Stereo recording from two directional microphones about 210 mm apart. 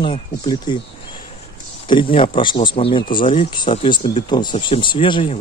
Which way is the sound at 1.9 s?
25° left (ahead or behind).